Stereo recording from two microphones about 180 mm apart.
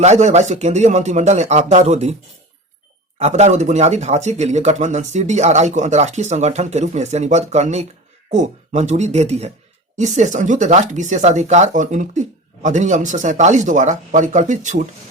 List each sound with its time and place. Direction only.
0.0 s speech: 40° right (ahead or behind)
3.2 s speech: 40° right (ahead or behind)